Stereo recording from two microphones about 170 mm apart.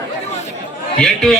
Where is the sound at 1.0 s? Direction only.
Centre (ahead or behind).